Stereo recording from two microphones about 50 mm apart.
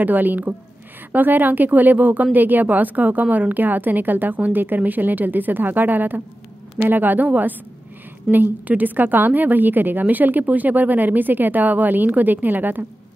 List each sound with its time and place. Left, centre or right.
0.0 s a woman's voice: right